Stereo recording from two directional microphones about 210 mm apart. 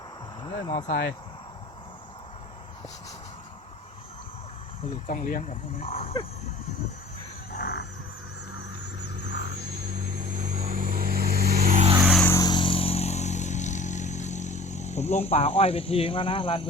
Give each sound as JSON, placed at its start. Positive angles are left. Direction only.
{"t": 0.6, "sound": "speech", "side_deg": 15}
{"t": 0.9, "sound": "speech", "side_deg": 50}
{"t": 5.0, "sound": "speech", "side_deg": 40}
{"t": 7.5, "sound": "music", "side_deg": 45}
{"t": 10.4, "sound": "vehicle", "side_deg": -40}
{"t": 12.1, "sound": "vehicle", "side_deg": 10}